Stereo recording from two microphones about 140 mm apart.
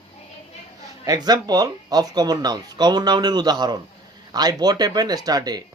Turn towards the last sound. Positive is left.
turn(degrees=-30)  # may be behind; listen again after turning